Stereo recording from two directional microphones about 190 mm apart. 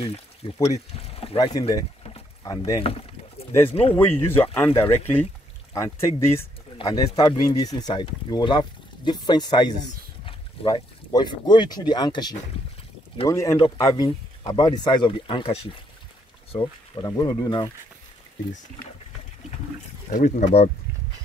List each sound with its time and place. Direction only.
0.0 s speech: 35° left (ahead or behind)
2.1 s rowboat: 20° left (ahead or behind)
3.9 s speech: 10° left (ahead or behind)
20.1 s speech: 40° left (ahead or behind)